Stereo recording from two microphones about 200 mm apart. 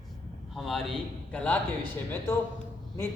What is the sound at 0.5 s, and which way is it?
A man's voice, centre (ahead or behind).